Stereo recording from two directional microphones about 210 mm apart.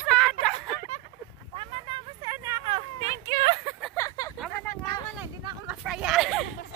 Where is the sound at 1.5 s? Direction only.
25° right (ahead or behind).